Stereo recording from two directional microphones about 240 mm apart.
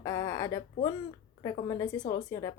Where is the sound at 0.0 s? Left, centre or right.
Centre.